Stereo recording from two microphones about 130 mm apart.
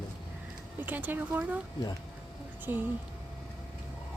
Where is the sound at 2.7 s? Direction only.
15° right (ahead or behind).